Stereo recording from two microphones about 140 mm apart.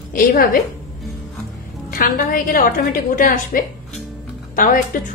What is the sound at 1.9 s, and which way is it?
A woman's voice, 90° left.